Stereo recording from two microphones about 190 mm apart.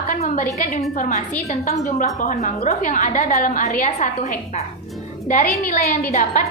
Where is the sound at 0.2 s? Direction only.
45° left (ahead or behind).